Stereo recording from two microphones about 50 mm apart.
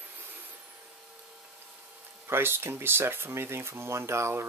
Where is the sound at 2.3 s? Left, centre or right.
Right.